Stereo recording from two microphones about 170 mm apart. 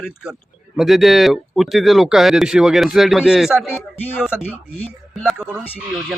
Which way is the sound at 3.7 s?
10° left (ahead or behind).